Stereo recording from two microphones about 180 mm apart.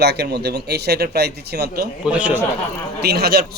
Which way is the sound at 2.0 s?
5° right (ahead or behind).